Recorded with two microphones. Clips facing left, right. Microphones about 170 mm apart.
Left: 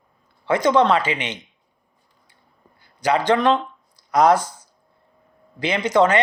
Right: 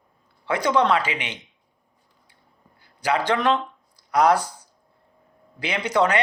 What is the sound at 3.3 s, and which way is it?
Speech, 35° left (ahead or behind).